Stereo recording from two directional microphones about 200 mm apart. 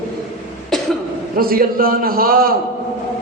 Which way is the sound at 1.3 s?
45° right (ahead or behind).